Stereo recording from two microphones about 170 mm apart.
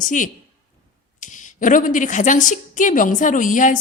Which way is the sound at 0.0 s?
50° left (ahead or behind).